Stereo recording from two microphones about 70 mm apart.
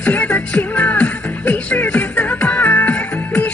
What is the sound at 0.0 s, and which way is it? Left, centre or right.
Music, left.